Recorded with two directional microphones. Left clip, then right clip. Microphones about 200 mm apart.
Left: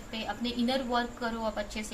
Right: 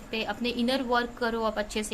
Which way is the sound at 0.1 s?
55° right (ahead or behind).